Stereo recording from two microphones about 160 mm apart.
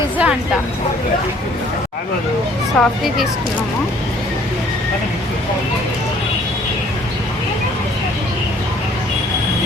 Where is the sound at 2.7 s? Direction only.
Centre (ahead or behind).